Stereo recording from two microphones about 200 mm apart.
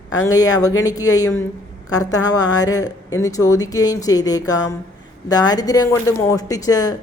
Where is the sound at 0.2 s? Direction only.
15° left (ahead or behind).